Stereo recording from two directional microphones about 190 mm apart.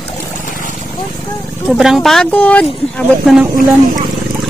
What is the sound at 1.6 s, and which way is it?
Speech, 5° right (ahead or behind).